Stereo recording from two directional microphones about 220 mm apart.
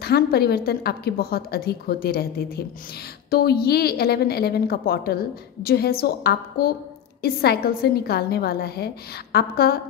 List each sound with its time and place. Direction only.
0.0 s a woman's voice: 45° left (ahead or behind)